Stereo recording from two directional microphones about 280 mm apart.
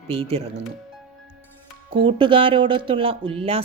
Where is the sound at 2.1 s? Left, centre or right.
Centre.